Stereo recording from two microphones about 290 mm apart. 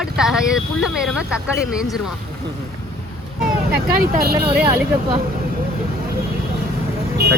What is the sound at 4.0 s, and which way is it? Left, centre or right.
Speech, right.